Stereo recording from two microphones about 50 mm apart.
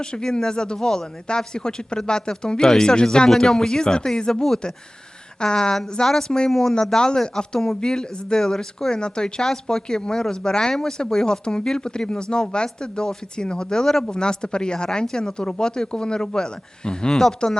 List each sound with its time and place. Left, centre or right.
0.0 s speech: centre